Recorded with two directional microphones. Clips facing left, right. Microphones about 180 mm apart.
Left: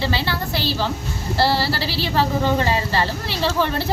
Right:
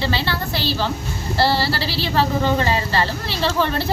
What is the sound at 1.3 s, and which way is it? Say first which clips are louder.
A woman's voice: right 1 dB; 10° left (ahead or behind).